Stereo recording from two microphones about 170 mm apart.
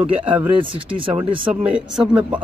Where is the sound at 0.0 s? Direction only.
30° right (ahead or behind).